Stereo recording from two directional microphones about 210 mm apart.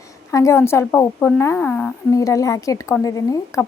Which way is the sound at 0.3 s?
15° left (ahead or behind).